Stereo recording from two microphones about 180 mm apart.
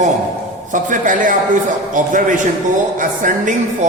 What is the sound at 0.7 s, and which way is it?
A man's voice, 45° right (ahead or behind).